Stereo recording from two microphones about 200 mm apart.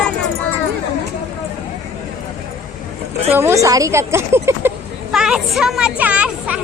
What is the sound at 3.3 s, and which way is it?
Speech, 10° right (ahead or behind).